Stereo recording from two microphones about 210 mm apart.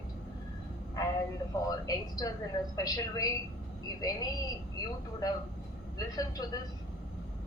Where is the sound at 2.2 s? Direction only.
15° left (ahead or behind).